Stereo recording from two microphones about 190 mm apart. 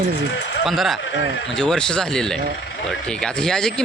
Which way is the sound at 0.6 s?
Centre (ahead or behind).